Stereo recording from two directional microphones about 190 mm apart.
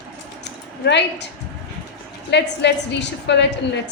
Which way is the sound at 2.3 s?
65° left (ahead or behind).